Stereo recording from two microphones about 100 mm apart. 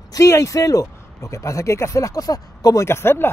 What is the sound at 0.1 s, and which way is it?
Speech, 30° left (ahead or behind).